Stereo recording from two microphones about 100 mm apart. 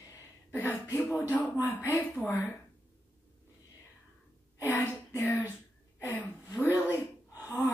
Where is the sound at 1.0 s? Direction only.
20° left (ahead or behind).